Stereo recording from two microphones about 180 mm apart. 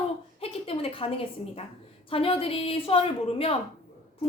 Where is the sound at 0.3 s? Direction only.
30° left (ahead or behind).